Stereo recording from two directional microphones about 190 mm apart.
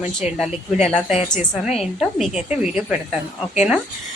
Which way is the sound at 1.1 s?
40° left (ahead or behind).